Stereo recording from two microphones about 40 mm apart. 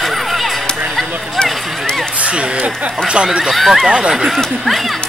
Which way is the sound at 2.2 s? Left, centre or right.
Right.